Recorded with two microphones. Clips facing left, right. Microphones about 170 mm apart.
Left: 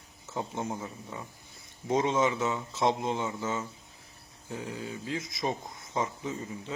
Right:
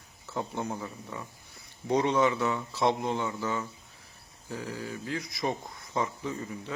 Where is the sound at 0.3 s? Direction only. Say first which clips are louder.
Right 1 dB; 20° left (ahead or behind).